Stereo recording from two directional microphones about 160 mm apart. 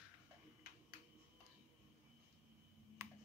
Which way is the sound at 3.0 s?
15° right (ahead or behind).